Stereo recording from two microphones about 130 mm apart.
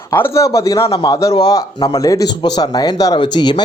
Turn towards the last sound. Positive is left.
turn(degrees=35)  # may be behind; listen again after turning